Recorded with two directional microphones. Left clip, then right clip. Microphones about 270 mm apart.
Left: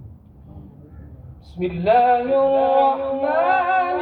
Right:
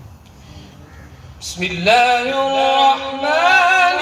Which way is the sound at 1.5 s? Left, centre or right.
Left.